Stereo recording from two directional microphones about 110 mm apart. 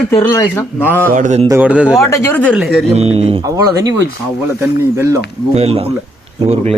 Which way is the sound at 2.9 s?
70° right (ahead or behind).